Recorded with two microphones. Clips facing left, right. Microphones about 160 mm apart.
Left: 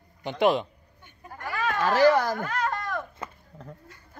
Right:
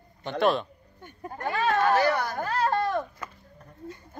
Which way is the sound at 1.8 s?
90° left.